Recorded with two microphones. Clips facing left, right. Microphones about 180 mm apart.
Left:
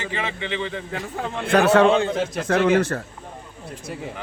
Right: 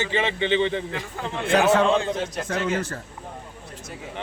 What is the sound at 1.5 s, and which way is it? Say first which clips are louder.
A man's voice: left 3 dB; 65° left (ahead or behind).